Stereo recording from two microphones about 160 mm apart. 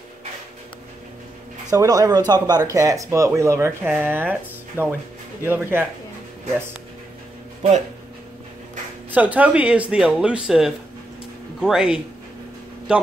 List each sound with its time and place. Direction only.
1.7 s speech: 20° right (ahead or behind)
9.1 s a man's voice: 10° right (ahead or behind)